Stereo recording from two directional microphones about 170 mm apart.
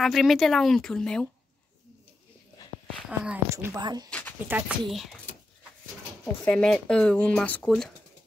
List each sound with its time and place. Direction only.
0.0 s speech: centre (ahead or behind)
3.4 s speech: 15° right (ahead or behind)
4.5 s speech: 10° right (ahead or behind)
4.8 s speech: centre (ahead or behind)
6.2 s speech: 10° left (ahead or behind)